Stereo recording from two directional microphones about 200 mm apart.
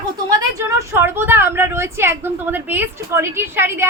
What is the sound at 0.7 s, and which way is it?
A woman's voice, 15° right (ahead or behind).